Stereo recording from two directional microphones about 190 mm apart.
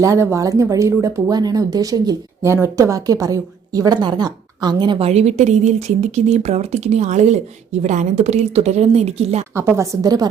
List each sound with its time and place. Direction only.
0.0 s speech: 15° right (ahead or behind); by 9.4 s 35° right (ahead or behind)
9.6 s a woman's voice: 15° right (ahead or behind)